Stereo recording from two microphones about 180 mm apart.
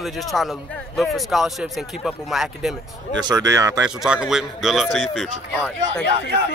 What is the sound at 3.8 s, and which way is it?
Speech, 5° right (ahead or behind).